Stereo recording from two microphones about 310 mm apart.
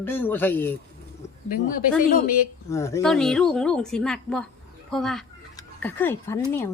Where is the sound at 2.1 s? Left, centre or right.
Left.